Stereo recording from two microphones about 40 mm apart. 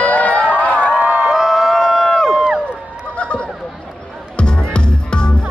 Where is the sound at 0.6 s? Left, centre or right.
Left.